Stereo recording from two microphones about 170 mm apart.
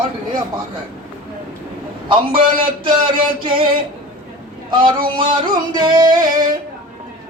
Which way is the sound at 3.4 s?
30° right (ahead or behind).